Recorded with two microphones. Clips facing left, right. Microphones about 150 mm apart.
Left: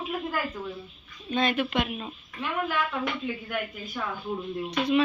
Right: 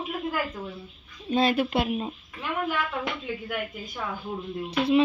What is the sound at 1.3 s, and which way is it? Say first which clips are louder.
Speech: right 3 dB; 30° right (ahead or behind).